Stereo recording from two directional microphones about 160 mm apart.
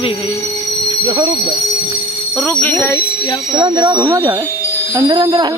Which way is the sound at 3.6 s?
30° right (ahead or behind).